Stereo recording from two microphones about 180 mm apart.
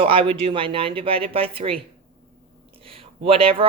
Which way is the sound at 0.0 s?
30° right (ahead or behind).